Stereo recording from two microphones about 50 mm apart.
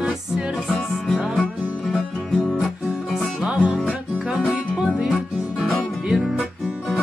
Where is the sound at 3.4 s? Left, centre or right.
Right.